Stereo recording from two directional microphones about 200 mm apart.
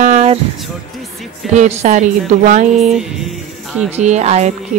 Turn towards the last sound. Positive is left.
turn(degrees=-35)  # may be behind; listen again after turning